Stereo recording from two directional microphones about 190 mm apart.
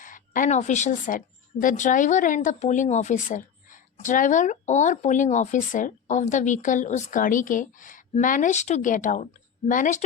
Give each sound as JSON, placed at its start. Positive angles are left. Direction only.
{"t": 0.0, "sound": "a woman's voice", "side_deg": 45}